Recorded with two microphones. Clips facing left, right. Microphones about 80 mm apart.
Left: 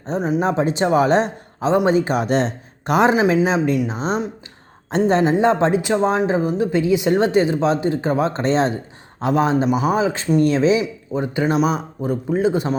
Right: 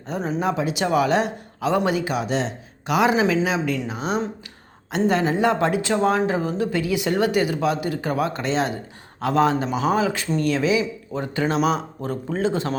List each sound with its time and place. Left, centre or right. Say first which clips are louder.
0.2 s speech: left 5 dB; centre
0.4 s speech: left 2 dB; left
9.2 s speech: left 2 dB; left